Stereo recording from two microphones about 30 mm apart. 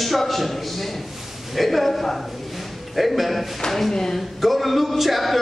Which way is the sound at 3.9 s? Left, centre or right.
Centre.